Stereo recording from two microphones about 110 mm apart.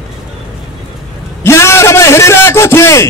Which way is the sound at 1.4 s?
25° left (ahead or behind).